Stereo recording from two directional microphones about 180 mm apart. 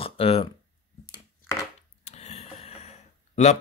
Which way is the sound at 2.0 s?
40° left (ahead or behind).